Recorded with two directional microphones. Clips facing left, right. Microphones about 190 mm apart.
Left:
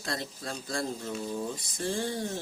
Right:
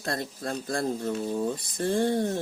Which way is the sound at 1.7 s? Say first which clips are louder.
Right 7 dB; 55° right (ahead or behind).